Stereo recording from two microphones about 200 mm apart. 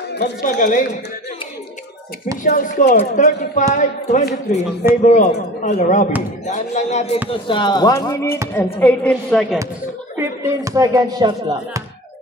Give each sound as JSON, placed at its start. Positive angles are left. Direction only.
{"t": 0.1, "sound": "speech", "side_deg": 55}
{"t": 0.5, "sound": "a man's voice", "side_deg": 40}
{"t": 2.4, "sound": "a man's voice", "side_deg": 40}
{"t": 10.4, "sound": "speech", "side_deg": -15}